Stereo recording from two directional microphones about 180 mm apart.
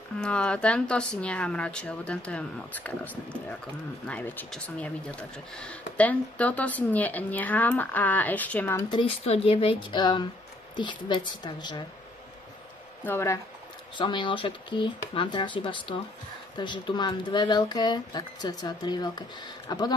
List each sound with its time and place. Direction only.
0.2 s speech: 5° left (ahead or behind)
8.8 s speech: 30° left (ahead or behind)
13.0 s speech: 15° left (ahead or behind)
13.9 s speech: 25° left (ahead or behind)